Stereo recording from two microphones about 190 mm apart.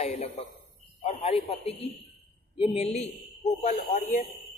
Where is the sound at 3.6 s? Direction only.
50° left (ahead or behind).